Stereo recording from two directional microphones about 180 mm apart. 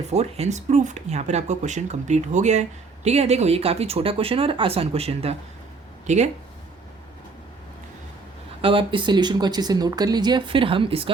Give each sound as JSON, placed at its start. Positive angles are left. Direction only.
{"t": 0.1, "sound": "speech", "side_deg": -35}
{"t": 8.6, "sound": "speech", "side_deg": -30}